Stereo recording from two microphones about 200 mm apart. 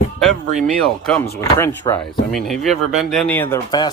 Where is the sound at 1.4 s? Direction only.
15° left (ahead or behind).